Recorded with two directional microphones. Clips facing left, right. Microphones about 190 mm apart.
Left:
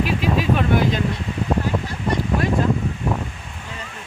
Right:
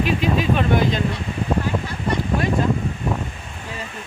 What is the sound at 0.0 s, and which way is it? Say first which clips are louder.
Speech: right 1 dB; 5° left (ahead or behind).